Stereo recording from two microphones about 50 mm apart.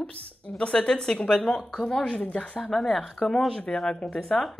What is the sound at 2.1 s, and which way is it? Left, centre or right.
Speech, left.